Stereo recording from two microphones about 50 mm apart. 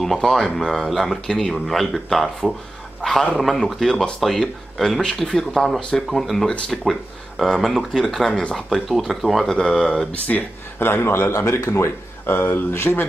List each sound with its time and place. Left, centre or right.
0.0 s speech: centre
3.0 s a sound: centre
3.3 s speech: centre
10.1 s speech: left
10.8 s a man's voice: left
12.3 s speech: left